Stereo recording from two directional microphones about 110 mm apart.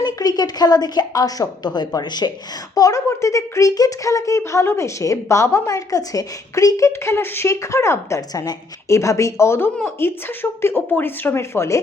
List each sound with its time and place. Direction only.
0.0 s a woman's voice: 35° left (ahead or behind)
2.7 s speech: 30° left (ahead or behind)